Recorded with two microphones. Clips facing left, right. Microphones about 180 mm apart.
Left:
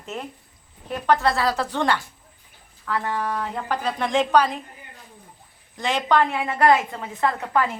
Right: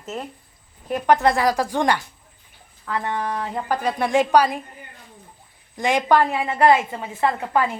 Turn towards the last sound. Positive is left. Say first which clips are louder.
# right 1 dB
turn(degrees=-5)  # may be behind; listen again after turning